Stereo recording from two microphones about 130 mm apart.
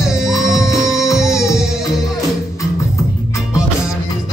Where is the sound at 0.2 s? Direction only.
Centre (ahead or behind).